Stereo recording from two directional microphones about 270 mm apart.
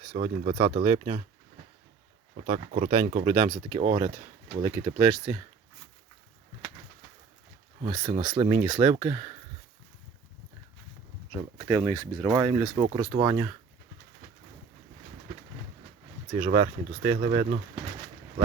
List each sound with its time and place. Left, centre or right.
0.1 s speech: right
2.5 s speech: right
7.8 s speech: centre
11.3 s speech: centre
16.4 s speech: right